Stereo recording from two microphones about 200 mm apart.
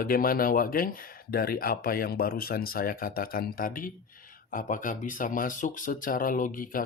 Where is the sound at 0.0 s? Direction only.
45° left (ahead or behind).